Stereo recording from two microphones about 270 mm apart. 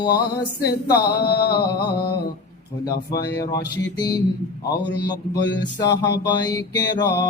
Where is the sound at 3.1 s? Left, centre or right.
Left.